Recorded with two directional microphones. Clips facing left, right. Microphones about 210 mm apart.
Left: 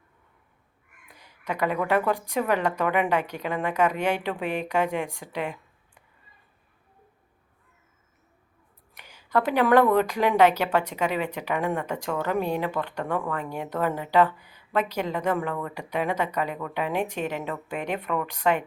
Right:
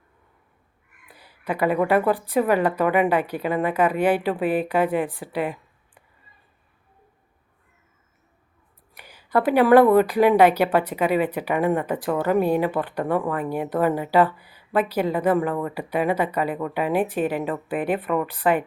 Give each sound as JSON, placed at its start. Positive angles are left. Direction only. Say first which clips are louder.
{"t": 1.1, "sound": "speech", "louder": "right 4 dB", "side_deg": -10}
{"t": 9.0, "sound": "a woman's voice", "louder": "right 3 dB", "side_deg": -10}